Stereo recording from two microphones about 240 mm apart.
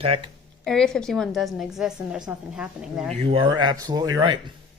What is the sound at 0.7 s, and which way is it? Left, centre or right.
A woman's voice, centre.